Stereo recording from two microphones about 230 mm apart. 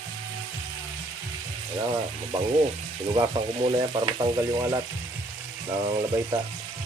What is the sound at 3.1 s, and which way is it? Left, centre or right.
Frying, right.